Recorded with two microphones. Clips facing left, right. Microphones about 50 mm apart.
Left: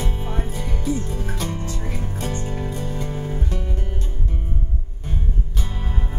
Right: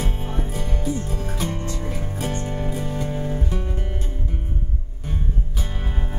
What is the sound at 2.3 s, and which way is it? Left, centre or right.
Music, right.